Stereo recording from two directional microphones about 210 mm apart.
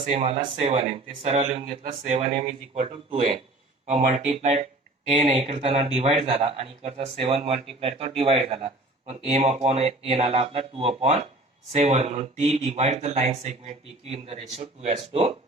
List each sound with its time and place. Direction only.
0.0 s a man's voice: 30° right (ahead or behind)